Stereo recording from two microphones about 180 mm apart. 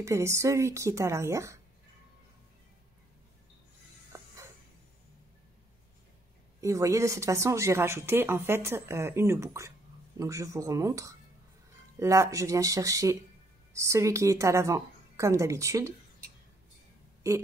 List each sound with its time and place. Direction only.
0.0 s speech: 15° right (ahead or behind)
6.6 s speech: 15° right (ahead or behind)